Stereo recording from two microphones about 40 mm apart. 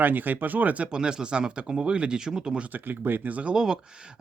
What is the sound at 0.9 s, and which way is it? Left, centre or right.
Speech, right.